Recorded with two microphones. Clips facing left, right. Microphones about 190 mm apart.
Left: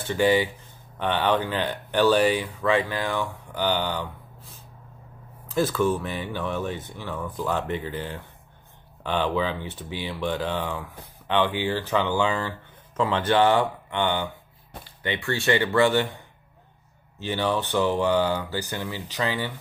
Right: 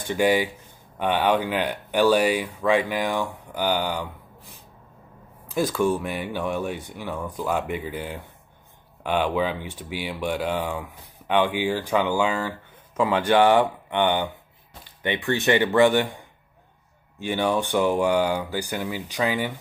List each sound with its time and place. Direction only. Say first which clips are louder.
0.0 s speech: even; 15° right (ahead or behind)
17.2 s speech: right 2 dB; 15° right (ahead or behind)